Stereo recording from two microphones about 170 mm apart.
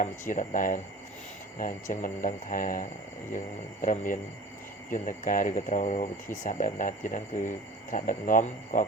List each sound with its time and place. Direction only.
0.0 s speech: 50° left (ahead or behind)